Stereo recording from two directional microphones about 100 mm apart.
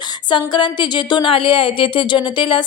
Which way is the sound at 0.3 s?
50° left (ahead or behind).